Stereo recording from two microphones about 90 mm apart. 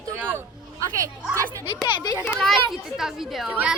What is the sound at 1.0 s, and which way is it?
Speech, 35° right (ahead or behind).